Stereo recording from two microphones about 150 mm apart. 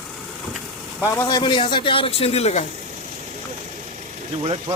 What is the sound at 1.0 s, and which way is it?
A man's voice, 20° left (ahead or behind).